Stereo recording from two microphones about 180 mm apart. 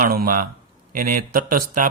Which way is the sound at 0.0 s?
55° right (ahead or behind).